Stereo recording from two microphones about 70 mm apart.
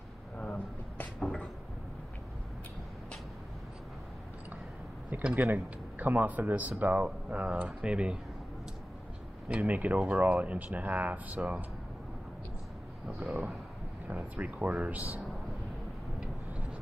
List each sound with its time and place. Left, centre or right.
0.4 s a sound: centre
5.1 s speech: right
9.5 s speech: right
13.2 s speech: centre